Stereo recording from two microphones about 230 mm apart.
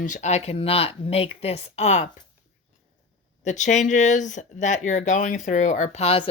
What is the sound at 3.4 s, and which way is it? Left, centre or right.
Speech, left.